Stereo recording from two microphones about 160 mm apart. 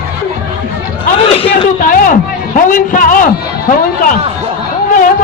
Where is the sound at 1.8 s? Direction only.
55° left (ahead or behind).